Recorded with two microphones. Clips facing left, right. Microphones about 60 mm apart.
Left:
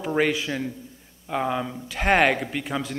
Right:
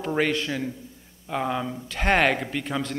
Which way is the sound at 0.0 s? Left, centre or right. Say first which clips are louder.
Left 1 dB; centre.